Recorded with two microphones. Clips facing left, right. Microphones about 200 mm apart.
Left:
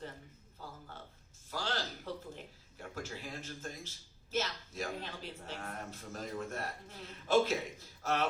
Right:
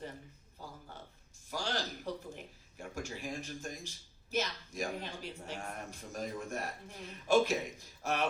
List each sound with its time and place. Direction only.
1.5 s speech: 15° right (ahead or behind)